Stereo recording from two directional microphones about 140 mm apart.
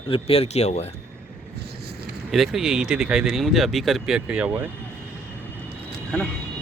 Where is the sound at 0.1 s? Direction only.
45° left (ahead or behind).